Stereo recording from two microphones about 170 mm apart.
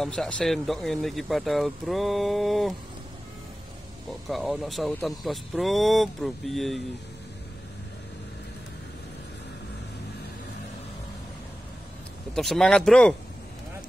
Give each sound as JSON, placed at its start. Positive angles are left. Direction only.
{"t": 0.0, "sound": "speech", "side_deg": 5}
{"t": 4.3, "sound": "speech", "side_deg": 0}
{"t": 12.4, "sound": "speech", "side_deg": 0}